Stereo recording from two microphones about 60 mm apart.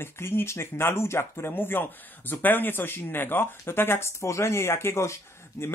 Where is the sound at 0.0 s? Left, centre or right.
Left.